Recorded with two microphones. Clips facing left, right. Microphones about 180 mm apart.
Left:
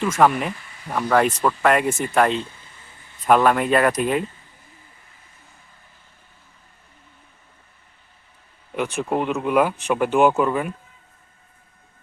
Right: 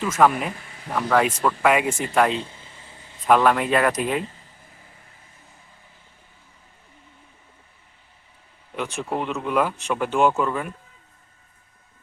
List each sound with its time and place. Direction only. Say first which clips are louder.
0.0 s speech: left 1 dB; centre (ahead or behind)
0.5 s a sound: even; 55° right (ahead or behind)
0.9 s speech: left 2 dB; centre (ahead or behind)
2.5 s vehicle: right 3 dB; 25° right (ahead or behind)
3.2 s speech: left 1 dB; 5° left (ahead or behind)
8.7 s speech: left 4 dB; 5° left (ahead or behind)